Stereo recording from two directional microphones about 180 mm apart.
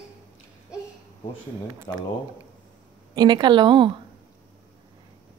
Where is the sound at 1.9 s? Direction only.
20° left (ahead or behind).